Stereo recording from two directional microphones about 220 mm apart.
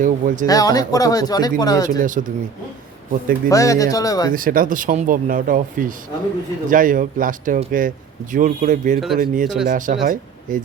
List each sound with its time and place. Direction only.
0.0 s a man's voice: 35° right (ahead or behind)
0.4 s speech: 15° left (ahead or behind)
2.0 s a man's voice: 35° right (ahead or behind)
3.5 s speech: 15° left (ahead or behind)
4.3 s a man's voice: 40° right (ahead or behind)